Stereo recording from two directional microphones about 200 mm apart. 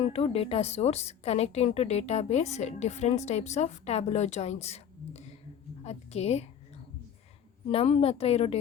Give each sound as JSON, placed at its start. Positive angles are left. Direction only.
{"t": 0.0, "sound": "a woman's voice", "side_deg": 30}
{"t": 7.7, "sound": "a woman's voice", "side_deg": 30}